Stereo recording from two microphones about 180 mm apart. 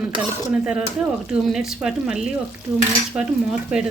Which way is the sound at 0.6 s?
5° right (ahead or behind).